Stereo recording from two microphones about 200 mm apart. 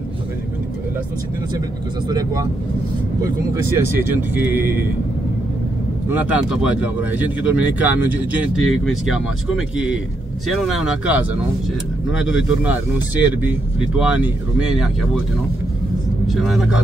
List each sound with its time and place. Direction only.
2.0 s speech: 20° right (ahead or behind)
3.5 s speech: 10° right (ahead or behind)
6.0 s speech: 10° right (ahead or behind)
16.3 s speech: centre (ahead or behind)